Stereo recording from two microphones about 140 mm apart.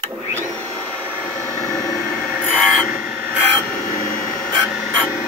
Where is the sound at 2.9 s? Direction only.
70° left (ahead or behind).